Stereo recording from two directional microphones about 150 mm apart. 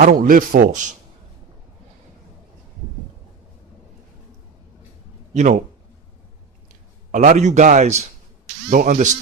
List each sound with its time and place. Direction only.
0.0 s a man's voice: 70° right (ahead or behind)
5.3 s speech: 50° right (ahead or behind)
7.1 s a man's voice: 55° right (ahead or behind)